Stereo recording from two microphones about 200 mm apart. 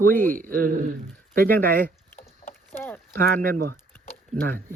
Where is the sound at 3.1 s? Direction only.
50° right (ahead or behind).